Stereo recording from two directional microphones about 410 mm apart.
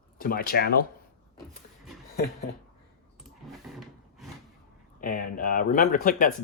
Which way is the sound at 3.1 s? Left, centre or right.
Centre.